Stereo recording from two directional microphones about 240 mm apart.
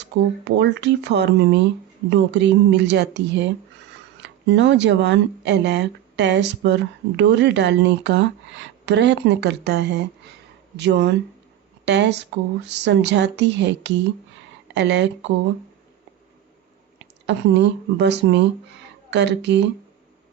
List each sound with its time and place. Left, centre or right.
0.0 s speech: right
17.2 s speech: right